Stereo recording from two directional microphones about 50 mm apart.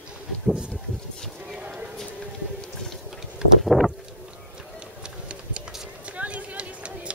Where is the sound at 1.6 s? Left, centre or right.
Right.